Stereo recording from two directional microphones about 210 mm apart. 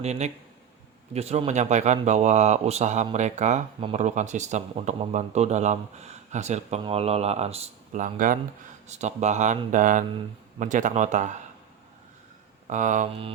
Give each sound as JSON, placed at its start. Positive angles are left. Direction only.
{"t": 0.0, "sound": "a man's voice", "side_deg": -30}
{"t": 12.6, "sound": "a man's voice", "side_deg": -35}